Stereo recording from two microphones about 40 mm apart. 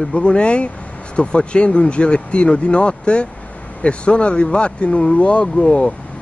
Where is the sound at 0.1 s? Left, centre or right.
Left.